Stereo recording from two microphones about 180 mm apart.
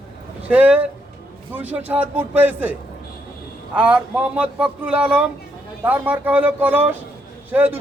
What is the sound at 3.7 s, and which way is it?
A man's voice, 5° right (ahead or behind).